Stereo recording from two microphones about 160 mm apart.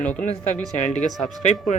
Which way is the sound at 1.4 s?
50° left (ahead or behind).